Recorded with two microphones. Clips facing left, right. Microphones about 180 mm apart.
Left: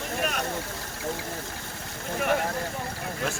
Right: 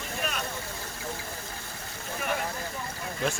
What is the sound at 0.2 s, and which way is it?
Vehicle, 60° left (ahead or behind).